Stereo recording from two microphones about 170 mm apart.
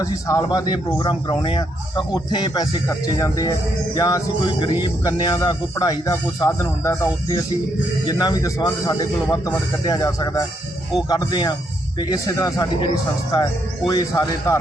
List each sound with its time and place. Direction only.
0.0 s a man's voice: 20° left (ahead or behind)